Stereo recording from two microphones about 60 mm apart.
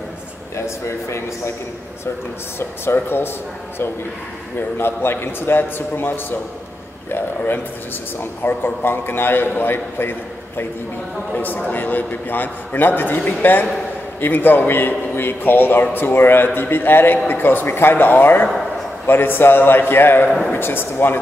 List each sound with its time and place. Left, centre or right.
0.6 s a man's voice: left
2.8 s a man's voice: left
4.6 s a man's voice: left
11.3 s a man's voice: left
20.2 s speech: centre
20.5 s a man's voice: left